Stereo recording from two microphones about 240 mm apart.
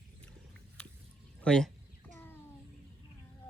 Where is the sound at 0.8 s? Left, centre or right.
Centre.